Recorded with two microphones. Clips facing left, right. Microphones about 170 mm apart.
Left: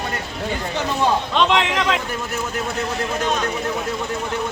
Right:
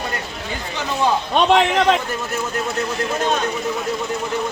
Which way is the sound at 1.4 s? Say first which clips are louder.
Right 7 dB; 35° right (ahead or behind).